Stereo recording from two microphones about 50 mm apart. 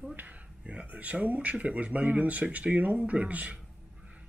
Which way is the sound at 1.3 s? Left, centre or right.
Right.